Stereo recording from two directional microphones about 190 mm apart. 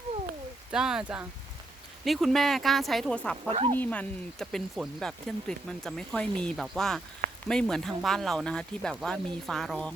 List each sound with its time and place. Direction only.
0.7 s speech: 5° right (ahead or behind)
3.5 s speech: 30° right (ahead or behind)
3.8 s speech: 5° left (ahead or behind)